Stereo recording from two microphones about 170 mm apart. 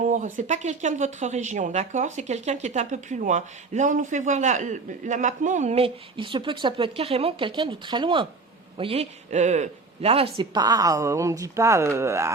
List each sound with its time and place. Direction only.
0.0 s speech: 45° right (ahead or behind); by 12.3 s 15° right (ahead or behind)